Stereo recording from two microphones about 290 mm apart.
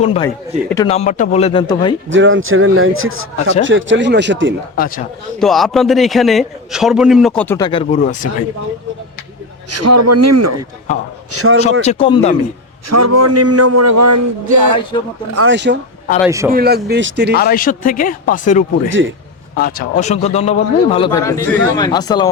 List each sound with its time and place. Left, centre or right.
0.0 s speech: centre
2.0 s a man's voice: right
5.4 s a man's voice: centre; by 8.3 s left
9.6 s a man's voice: right
11.3 s a man's voice: right
11.8 s speech: left
12.9 s a man's voice: right
15.3 s a man's voice: right
15.5 s speech: right
16.2 s a man's voice: centre
16.5 s speech: right
17.3 s speech: left
18.9 s speech: right
19.5 s a man's voice: left; by 22.3 s centre